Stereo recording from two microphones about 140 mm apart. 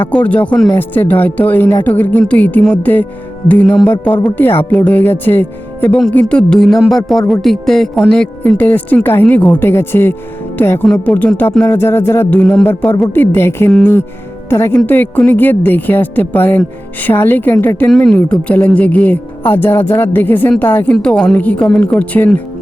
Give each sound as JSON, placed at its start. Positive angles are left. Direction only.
{"t": 0.0, "sound": "speech", "side_deg": 10}
{"t": 6.1, "sound": "music", "side_deg": 10}
{"t": 8.6, "sound": "speech", "side_deg": 10}